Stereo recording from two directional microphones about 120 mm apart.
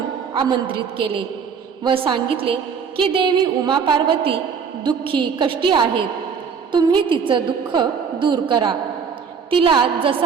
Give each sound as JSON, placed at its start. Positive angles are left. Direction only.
{"t": 0.3, "sound": "a woman's voice", "side_deg": -45}